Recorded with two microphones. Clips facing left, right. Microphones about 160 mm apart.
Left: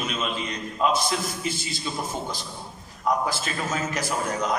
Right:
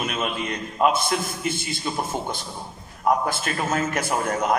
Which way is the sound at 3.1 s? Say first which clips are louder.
Right 3 dB; 55° right (ahead or behind).